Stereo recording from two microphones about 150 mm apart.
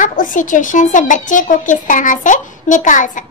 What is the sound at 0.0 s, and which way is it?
A child's voice, 60° left (ahead or behind).